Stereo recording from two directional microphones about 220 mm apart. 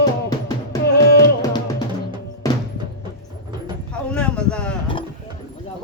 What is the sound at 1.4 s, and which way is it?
Drum, 20° left (ahead or behind).